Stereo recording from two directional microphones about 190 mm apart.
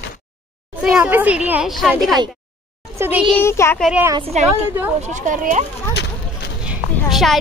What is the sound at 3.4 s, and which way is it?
Child singing, 15° left (ahead or behind).